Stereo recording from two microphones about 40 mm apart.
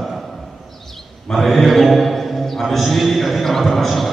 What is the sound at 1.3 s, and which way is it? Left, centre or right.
Chant, centre.